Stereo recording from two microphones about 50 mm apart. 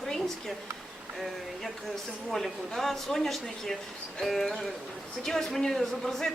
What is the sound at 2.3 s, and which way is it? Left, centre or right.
A man's voice, centre.